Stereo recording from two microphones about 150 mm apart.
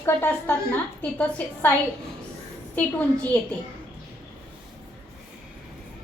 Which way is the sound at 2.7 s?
10° left (ahead or behind).